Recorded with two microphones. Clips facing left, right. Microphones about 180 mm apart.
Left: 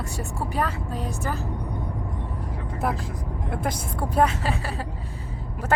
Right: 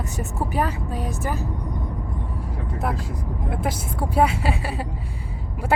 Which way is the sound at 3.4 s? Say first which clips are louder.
Right 1 dB; 5° right (ahead or behind).